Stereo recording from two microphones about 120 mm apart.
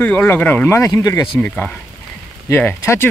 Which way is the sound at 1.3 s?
10° left (ahead or behind).